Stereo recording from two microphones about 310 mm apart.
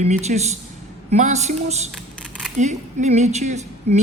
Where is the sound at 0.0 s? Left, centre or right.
Right.